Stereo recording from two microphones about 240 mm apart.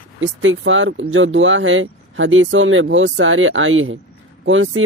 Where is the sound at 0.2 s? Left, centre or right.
Right.